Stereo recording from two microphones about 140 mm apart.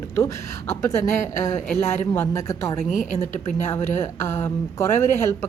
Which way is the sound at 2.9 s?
65° left (ahead or behind).